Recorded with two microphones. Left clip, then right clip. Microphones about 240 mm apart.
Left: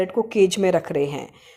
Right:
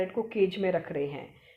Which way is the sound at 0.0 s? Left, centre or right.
Left.